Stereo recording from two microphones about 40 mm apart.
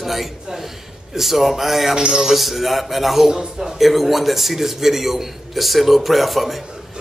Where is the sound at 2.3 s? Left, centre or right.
Centre.